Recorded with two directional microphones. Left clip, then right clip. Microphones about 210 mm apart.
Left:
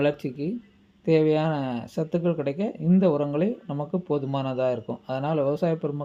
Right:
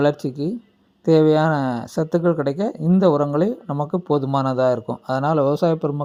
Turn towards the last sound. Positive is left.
turn(degrees=-35)  # may be behind; listen again after turning